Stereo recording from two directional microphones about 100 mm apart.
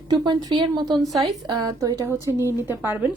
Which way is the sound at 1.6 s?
40° right (ahead or behind).